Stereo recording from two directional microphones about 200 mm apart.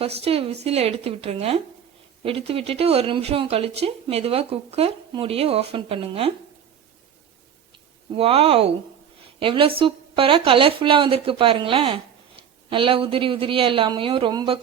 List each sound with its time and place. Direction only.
0.0 s a woman's voice: 30° right (ahead or behind)
8.1 s speech: 30° right (ahead or behind)